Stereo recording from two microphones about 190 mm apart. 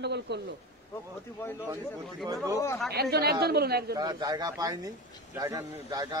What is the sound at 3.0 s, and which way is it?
Speech, 55° right (ahead or behind).